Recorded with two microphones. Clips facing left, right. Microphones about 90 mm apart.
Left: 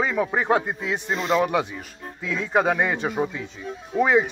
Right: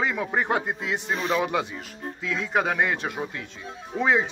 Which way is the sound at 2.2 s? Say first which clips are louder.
Left 3 dB; 5° left (ahead or behind).